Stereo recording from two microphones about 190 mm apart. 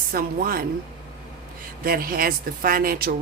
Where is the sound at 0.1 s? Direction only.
50° right (ahead or behind).